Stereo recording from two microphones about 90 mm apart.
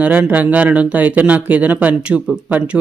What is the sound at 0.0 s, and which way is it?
Speech, 15° right (ahead or behind).